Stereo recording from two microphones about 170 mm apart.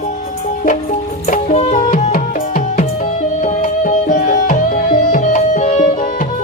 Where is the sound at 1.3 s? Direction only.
40° left (ahead or behind).